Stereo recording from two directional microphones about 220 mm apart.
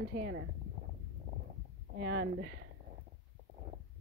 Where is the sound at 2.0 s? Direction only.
55° right (ahead or behind).